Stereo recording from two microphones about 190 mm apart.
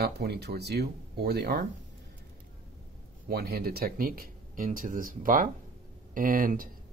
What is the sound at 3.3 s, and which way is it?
Speech, 55° right (ahead or behind).